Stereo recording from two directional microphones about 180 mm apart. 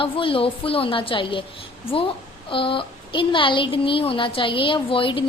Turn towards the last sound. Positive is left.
turn(degrees=30)  # may be behind; listen again after turning